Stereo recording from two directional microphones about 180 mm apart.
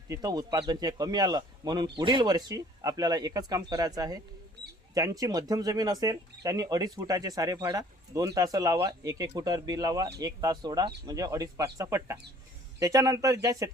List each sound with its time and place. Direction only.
0.1 s speech: 20° right (ahead or behind)